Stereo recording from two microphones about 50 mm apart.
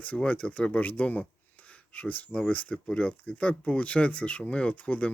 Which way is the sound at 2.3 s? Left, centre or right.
Centre.